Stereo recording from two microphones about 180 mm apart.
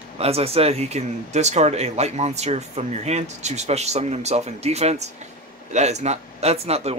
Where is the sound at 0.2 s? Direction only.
35° right (ahead or behind).